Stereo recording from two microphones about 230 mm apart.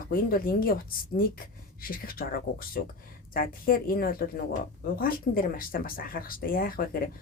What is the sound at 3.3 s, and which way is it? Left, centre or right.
Speech, left.